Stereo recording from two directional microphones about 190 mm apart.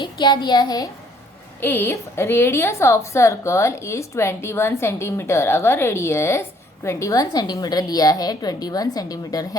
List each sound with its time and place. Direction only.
0.0 s a woman's voice: 25° left (ahead or behind)